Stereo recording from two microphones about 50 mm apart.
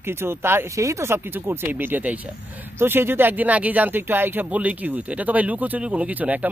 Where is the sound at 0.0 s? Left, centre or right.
Right.